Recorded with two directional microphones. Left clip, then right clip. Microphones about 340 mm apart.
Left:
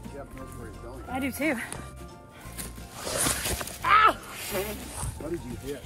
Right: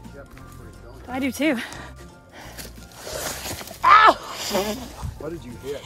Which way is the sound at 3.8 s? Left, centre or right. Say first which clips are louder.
Right 7 dB; centre.